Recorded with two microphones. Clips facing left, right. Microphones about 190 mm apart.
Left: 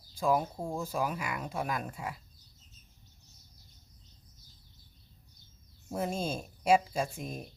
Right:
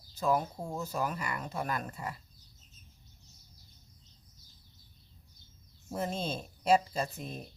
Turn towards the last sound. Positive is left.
turn(degrees=10)  # may be behind; listen again after turning